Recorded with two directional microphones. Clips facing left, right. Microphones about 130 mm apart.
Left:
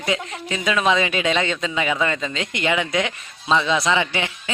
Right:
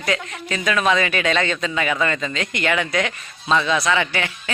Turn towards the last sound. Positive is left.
turn(degrees=20)  # may be behind; listen again after turning